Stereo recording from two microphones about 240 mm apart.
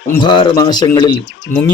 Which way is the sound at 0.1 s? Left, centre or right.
Centre.